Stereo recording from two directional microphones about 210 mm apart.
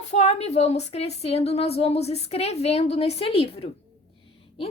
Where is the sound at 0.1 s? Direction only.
30° left (ahead or behind).